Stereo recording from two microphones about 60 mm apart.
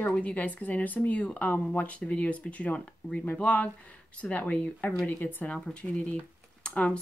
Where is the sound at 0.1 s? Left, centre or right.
Left.